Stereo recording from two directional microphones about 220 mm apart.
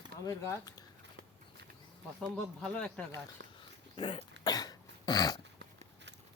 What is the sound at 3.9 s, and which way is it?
Cough, 25° left (ahead or behind).